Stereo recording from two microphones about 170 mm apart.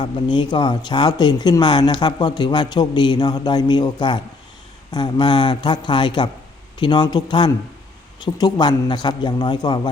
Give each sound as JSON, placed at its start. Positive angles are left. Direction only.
{"t": 0.0, "sound": "speech", "side_deg": 25}